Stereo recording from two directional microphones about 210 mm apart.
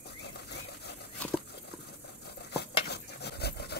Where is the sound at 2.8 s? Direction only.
50° left (ahead or behind).